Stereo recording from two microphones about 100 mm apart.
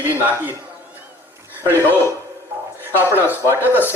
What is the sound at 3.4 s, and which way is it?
Speech, 25° left (ahead or behind).